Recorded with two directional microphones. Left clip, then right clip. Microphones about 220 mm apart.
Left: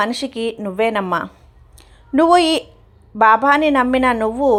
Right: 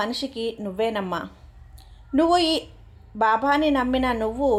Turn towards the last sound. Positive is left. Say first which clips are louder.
# left 7 dB
turn(degrees=25)  # may be behind; listen again after turning